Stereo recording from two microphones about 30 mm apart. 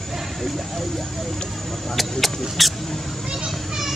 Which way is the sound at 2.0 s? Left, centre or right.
Centre.